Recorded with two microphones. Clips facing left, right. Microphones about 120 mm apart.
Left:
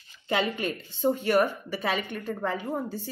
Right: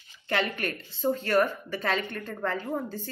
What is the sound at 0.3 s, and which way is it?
A woman's voice, 15° left (ahead or behind).